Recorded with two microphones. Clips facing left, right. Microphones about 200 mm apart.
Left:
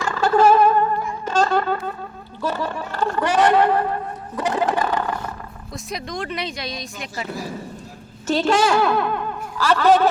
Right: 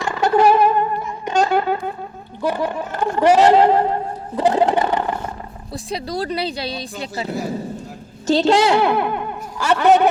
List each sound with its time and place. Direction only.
0.0 s music: 20° right (ahead or behind)
2.4 s a sound: 15° right (ahead or behind)
5.7 s a woman's voice: 35° right (ahead or behind); by 10.1 s 20° right (ahead or behind)